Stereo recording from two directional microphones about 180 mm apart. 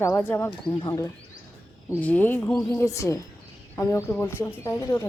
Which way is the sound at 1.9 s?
10° left (ahead or behind).